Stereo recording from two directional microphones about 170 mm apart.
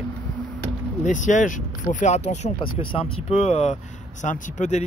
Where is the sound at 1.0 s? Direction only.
45° left (ahead or behind).